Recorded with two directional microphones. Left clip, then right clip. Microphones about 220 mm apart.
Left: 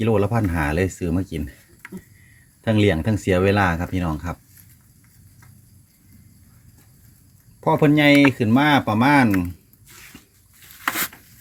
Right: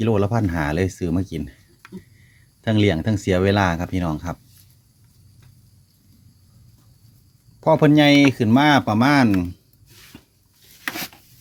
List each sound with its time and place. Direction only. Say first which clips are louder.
0.0 s speech: even; 15° right (ahead or behind)
2.6 s speech: left 1 dB; 10° right (ahead or behind)
7.6 s speech: right 2 dB; 15° right (ahead or behind)